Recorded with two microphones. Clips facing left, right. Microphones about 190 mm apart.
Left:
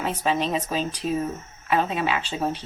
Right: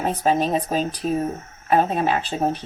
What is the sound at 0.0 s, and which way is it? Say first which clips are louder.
Speech: right 4 dB; 40° right (ahead or behind).